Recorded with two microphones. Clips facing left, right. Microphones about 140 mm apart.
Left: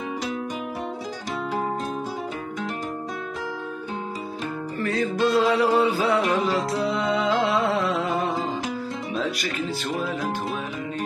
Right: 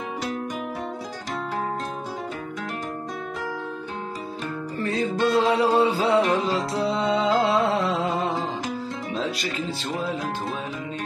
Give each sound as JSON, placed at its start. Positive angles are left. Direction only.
{"t": 4.7, "sound": "music", "side_deg": -20}